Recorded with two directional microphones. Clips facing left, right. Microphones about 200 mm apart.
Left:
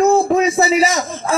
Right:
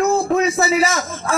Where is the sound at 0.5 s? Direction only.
20° left (ahead or behind).